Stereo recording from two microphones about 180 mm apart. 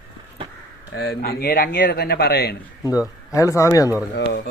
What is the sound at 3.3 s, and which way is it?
Speech, 15° left (ahead or behind).